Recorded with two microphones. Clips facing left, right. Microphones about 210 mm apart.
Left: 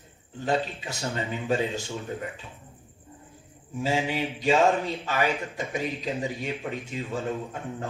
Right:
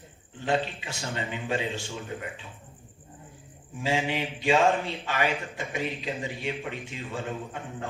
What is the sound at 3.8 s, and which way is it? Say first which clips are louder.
A man's voice: left 1 dB; 40° left (ahead or behind).